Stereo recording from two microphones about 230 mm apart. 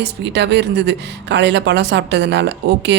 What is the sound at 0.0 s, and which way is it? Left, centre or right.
Speech, right.